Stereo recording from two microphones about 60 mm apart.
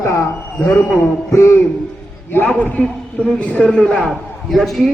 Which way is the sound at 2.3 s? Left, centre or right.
Left.